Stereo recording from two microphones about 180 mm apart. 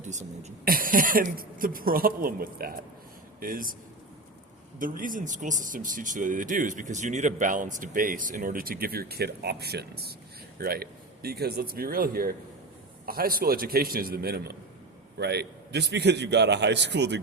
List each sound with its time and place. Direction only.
0.0 s speech: 40° right (ahead or behind)
4.8 s a man's voice: 50° right (ahead or behind); by 17.2 s 75° right (ahead or behind)